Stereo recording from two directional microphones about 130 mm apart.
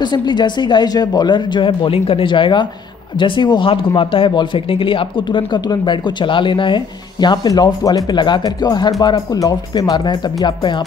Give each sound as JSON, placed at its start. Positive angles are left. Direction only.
{"t": 0.0, "sound": "speech", "side_deg": 35}